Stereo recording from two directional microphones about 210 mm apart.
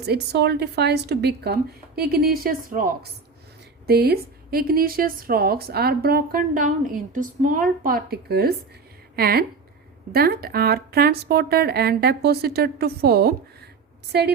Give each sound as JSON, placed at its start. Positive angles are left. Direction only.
{"t": 0.0, "sound": "a woman's voice", "side_deg": -50}